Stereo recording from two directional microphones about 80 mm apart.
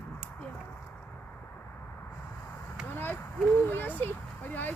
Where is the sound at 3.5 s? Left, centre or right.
Left.